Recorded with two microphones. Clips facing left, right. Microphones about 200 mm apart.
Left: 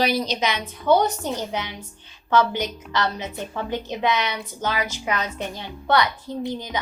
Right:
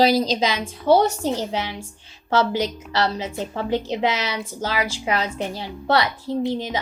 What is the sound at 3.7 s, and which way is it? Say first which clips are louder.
A woman's voice: right 2 dB; 30° right (ahead or behind).